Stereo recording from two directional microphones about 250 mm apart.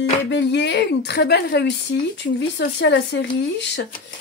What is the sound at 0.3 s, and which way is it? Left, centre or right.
Speech, left.